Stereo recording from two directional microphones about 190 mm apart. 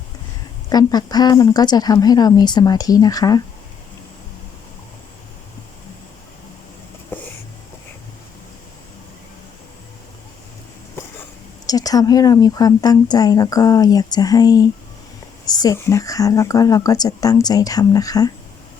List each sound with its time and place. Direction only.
0.7 s speech: 20° left (ahead or behind)
7.1 s a sound: 10° left (ahead or behind)
11.6 s speech: 20° left (ahead or behind)